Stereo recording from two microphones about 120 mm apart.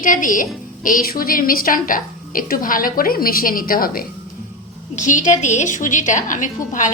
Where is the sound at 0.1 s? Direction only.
90° left.